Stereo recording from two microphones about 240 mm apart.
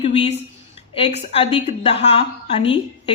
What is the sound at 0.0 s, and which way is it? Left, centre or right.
A woman's voice, left.